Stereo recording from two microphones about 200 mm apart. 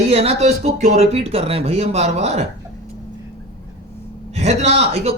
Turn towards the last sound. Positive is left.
turn(degrees=-30)  # may be behind; listen again after turning